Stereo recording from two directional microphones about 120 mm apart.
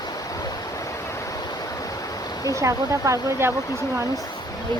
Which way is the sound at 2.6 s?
25° right (ahead or behind).